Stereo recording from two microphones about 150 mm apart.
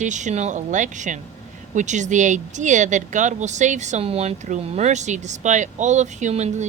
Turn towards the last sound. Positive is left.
turn(degrees=-50)  # may be behind; listen again after turning